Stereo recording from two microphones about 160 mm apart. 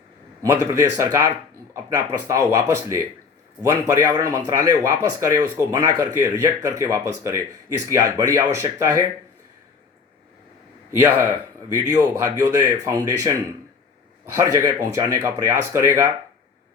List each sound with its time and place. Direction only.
0.4 s speech: 20° right (ahead or behind)
10.9 s speech: 15° right (ahead or behind)
14.3 s speech: 20° right (ahead or behind)